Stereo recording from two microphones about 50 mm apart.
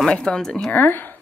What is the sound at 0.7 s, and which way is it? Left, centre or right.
Speech, left.